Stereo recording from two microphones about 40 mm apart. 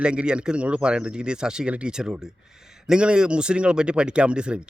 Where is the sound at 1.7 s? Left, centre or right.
Right.